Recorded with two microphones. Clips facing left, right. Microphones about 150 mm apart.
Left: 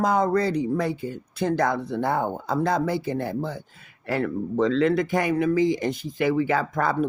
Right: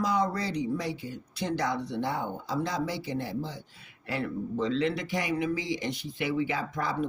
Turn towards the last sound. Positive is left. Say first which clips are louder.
# left 7 dB
turn(degrees=55)  # may be behind; listen again after turning